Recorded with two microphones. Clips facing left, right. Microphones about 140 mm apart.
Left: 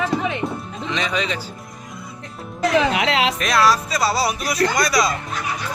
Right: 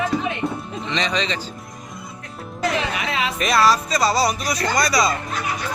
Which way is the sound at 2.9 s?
85° left.